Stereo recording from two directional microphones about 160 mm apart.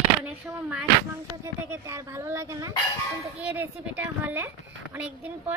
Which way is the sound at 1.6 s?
20° right (ahead or behind).